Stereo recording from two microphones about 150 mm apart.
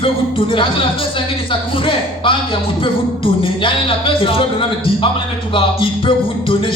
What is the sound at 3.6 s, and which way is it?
Speech, 35° left (ahead or behind).